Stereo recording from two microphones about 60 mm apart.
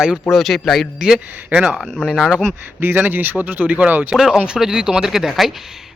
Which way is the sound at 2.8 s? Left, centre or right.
Right.